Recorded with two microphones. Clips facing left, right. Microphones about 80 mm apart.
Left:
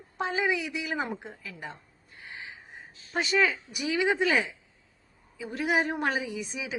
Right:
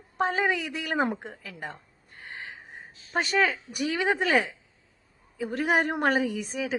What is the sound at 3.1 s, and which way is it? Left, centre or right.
A woman's voice, right.